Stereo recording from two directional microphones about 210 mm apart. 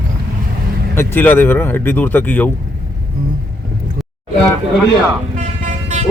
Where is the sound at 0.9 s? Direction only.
10° left (ahead or behind).